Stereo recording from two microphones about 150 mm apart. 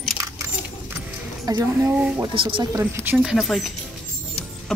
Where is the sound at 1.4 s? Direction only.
25° right (ahead or behind).